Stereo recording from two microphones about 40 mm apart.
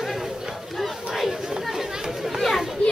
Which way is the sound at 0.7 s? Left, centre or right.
Centre.